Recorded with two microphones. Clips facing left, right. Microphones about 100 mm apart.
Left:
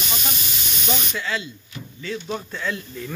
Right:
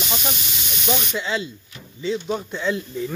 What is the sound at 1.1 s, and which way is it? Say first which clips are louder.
Speech: right 2 dB; 25° right (ahead or behind).